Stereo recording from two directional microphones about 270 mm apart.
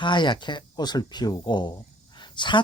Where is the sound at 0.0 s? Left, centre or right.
Centre.